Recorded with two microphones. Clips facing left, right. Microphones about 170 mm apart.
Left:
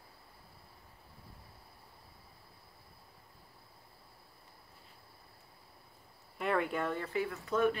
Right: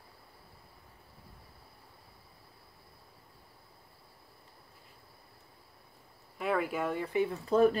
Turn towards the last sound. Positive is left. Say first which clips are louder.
# right 6 dB
turn(degrees=-30)  # may be behind; listen again after turning